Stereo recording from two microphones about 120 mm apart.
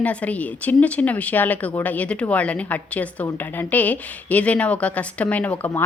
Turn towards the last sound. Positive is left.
turn(degrees=15)  # may be behind; listen again after turning